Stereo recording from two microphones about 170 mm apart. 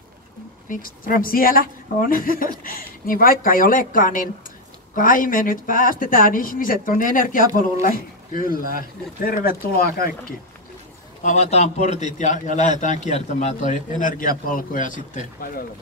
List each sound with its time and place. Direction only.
0.7 s a man's voice: 55° left (ahead or behind)
11.2 s a man's voice: 40° left (ahead or behind)